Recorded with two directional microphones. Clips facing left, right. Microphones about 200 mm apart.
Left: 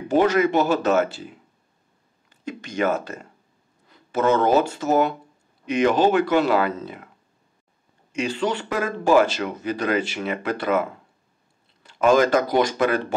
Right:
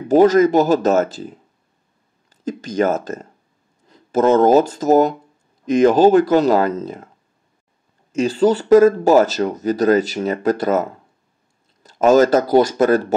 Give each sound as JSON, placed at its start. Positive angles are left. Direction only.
{"t": 0.1, "sound": "speech", "side_deg": -40}
{"t": 2.4, "sound": "speech", "side_deg": -40}
{"t": 8.3, "sound": "speech", "side_deg": -35}